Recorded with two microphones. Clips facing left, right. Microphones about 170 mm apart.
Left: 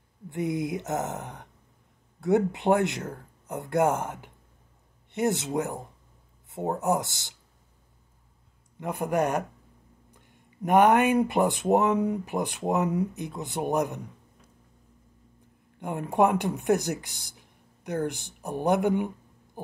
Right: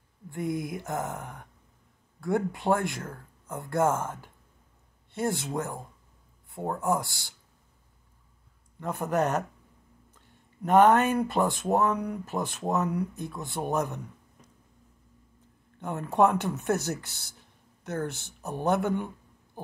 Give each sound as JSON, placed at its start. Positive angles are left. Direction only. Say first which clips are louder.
{"t": 0.3, "sound": "speech", "louder": "left 3 dB", "side_deg": 20}
{"t": 8.7, "sound": "speech", "louder": "left 1 dB", "side_deg": 15}
{"t": 15.8, "sound": "speech", "louder": "even", "side_deg": 15}